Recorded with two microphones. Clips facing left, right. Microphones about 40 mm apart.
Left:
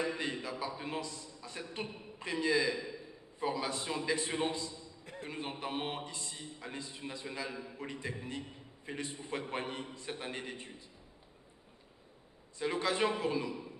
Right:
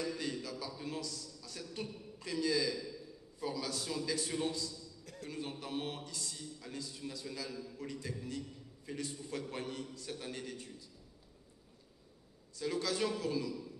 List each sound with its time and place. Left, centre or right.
0.0 s a man's voice: left
12.5 s a man's voice: left